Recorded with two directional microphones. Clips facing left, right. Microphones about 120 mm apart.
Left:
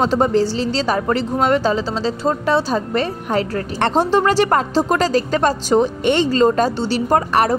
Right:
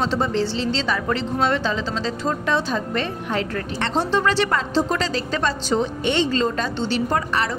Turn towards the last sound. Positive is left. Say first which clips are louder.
# left 6 dB
turn(degrees=45)  # may be behind; listen again after turning